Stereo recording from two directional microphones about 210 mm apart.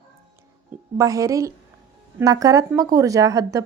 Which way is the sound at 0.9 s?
15° right (ahead or behind).